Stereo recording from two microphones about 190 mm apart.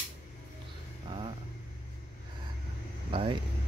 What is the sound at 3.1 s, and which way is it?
Speech, 30° right (ahead or behind).